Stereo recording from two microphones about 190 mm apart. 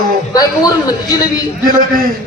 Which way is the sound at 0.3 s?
20° left (ahead or behind).